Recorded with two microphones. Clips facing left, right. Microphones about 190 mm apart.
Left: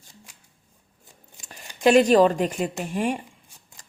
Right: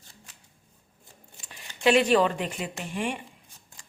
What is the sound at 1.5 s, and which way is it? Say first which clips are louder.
Speech: left 4 dB; 40° left (ahead or behind).